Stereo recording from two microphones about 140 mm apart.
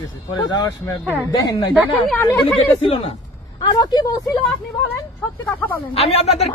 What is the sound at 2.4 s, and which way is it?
Speech, 40° left (ahead or behind).